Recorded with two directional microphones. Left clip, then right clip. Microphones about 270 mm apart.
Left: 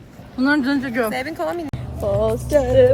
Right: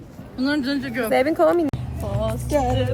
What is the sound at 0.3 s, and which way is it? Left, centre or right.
Speech, centre.